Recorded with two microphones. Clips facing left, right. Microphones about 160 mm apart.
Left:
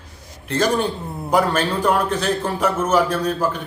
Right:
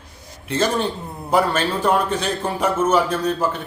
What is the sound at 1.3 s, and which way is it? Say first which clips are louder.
A man's voice: even; 10° left (ahead or behind).